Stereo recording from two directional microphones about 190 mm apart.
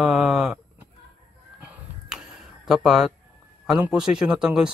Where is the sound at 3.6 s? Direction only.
5° right (ahead or behind).